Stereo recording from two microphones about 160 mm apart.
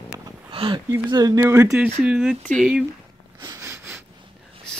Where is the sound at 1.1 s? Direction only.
20° right (ahead or behind); by 2.9 s 5° right (ahead or behind).